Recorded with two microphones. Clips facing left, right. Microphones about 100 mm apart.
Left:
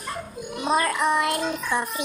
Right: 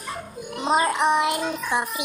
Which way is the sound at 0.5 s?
20° right (ahead or behind).